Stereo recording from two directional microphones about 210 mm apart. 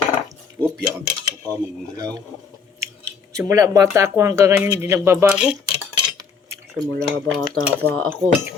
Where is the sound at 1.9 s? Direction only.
20° right (ahead or behind).